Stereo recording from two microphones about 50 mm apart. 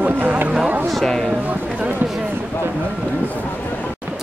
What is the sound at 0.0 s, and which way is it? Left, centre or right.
Music, right.